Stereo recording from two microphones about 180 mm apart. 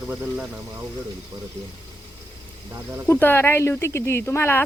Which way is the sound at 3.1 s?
10° left (ahead or behind).